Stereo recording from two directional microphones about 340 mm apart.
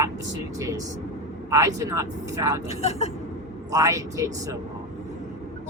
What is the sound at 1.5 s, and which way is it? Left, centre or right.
Speech, centre.